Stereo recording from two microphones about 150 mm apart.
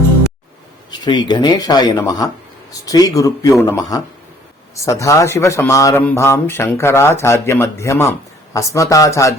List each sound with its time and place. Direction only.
0.9 s speech: 30° left (ahead or behind)